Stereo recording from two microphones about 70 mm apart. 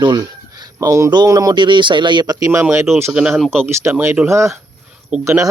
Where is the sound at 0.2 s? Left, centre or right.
Right.